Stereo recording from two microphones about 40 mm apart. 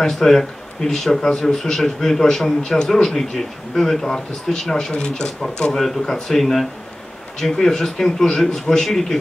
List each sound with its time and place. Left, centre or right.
0.0 s a man's voice: centre
4.9 s speech: left
5.4 s a man's voice: centre